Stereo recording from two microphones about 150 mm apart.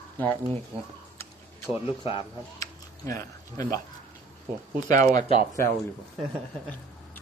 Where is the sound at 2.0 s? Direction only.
35° left (ahead or behind).